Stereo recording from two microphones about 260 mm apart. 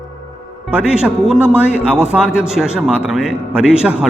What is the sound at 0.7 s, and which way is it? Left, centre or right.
A man's voice, centre.